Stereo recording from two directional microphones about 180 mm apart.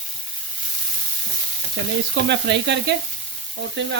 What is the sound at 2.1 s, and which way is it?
Frying, 75° right (ahead or behind).